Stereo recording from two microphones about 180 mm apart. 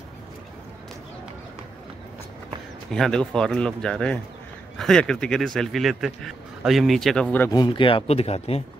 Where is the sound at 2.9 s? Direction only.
5° left (ahead or behind).